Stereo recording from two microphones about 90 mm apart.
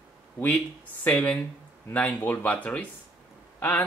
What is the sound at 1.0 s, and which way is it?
Speech, 20° left (ahead or behind).